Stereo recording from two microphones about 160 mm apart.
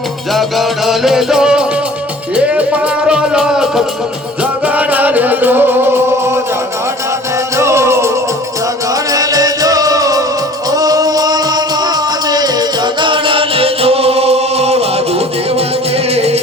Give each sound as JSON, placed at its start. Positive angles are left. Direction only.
{"t": 0.3, "sound": "music", "side_deg": 0}
{"t": 7.5, "sound": "music", "side_deg": -15}
{"t": 9.1, "sound": "music", "side_deg": -25}
{"t": 16.1, "sound": "music", "side_deg": -40}